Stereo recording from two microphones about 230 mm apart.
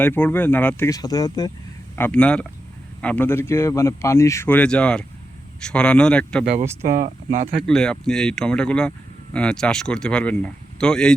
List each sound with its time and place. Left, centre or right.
0.0 s speech: centre
6.4 s speech: right
7.7 s speech: centre